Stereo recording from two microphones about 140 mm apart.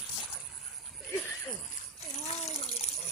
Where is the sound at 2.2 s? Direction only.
50° left (ahead or behind).